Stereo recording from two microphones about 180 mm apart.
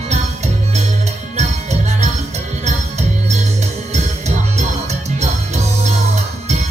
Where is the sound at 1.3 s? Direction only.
40° right (ahead or behind).